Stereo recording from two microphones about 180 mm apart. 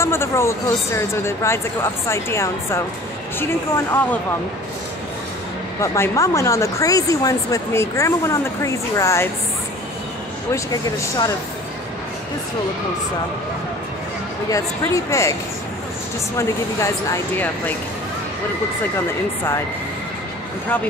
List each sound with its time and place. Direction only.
0.0 s speech: 15° left (ahead or behind)
5.8 s speech: 15° left (ahead or behind)
10.5 s speech: 20° left (ahead or behind)
14.5 s speech: 15° left (ahead or behind)
16.3 s speech: 15° left (ahead or behind)